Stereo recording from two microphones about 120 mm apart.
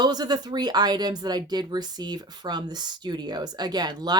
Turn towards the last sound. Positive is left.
turn(degrees=-35)  # may be behind; listen again after turning